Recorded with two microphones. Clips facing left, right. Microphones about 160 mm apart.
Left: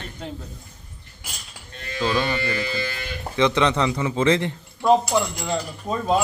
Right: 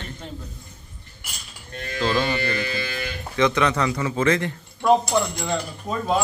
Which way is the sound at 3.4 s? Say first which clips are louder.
Left 1 dB; 25° left (ahead or behind).